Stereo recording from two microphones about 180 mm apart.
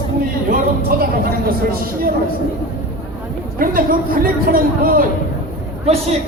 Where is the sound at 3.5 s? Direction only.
50° right (ahead or behind).